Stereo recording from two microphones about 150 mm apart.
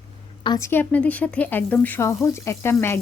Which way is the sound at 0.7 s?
10° left (ahead or behind).